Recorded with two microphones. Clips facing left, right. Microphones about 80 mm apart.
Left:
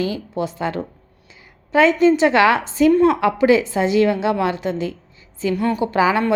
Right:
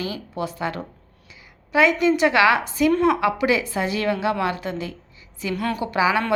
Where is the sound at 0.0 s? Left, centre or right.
Left.